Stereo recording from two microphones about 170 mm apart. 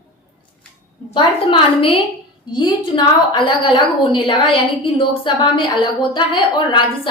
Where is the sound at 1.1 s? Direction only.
30° left (ahead or behind).